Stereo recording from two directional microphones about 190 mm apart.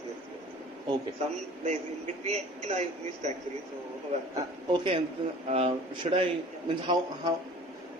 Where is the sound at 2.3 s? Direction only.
35° right (ahead or behind).